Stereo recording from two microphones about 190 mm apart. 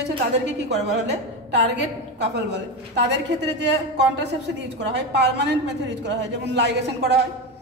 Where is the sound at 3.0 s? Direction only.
65° right (ahead or behind).